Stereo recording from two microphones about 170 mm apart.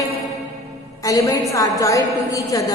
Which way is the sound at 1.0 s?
20° left (ahead or behind).